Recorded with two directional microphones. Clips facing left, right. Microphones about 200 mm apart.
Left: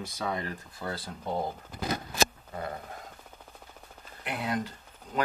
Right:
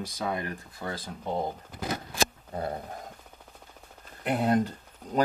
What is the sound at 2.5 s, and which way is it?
Speech, 30° right (ahead or behind).